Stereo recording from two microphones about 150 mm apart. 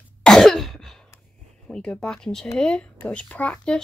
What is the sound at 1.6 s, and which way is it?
Speech, 5° left (ahead or behind).